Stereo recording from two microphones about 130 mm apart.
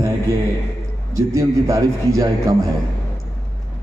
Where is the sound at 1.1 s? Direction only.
25° right (ahead or behind).